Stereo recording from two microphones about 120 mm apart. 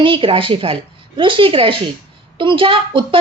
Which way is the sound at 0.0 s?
45° right (ahead or behind).